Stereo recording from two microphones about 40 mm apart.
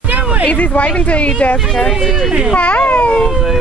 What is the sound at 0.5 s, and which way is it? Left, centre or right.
Speech, left.